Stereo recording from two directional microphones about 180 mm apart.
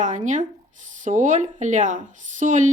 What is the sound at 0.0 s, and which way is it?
Speech, 45° right (ahead or behind).